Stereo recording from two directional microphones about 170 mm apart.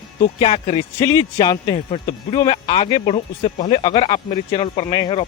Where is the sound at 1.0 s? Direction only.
20° left (ahead or behind).